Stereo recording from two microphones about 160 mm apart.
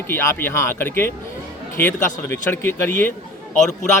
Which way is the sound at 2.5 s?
15° left (ahead or behind).